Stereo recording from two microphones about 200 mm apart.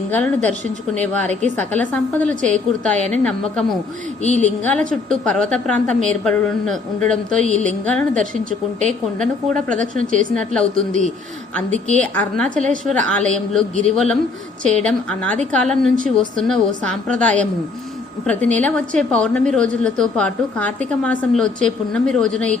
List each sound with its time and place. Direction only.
0.1 s a woman's voice: 5° left (ahead or behind)
1.3 s a woman's voice: 35° right (ahead or behind)
1.5 s a woman's voice: 5° left (ahead or behind)
10.1 s a woman's voice: 40° right (ahead or behind)
10.3 s a woman's voice: 5° left (ahead or behind)
12.6 s a woman's voice: 40° right (ahead or behind)
12.9 s a woman's voice: 5° left (ahead or behind)